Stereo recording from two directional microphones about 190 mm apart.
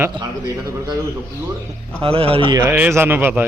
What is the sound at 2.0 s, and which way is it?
Speech, 30° right (ahead or behind).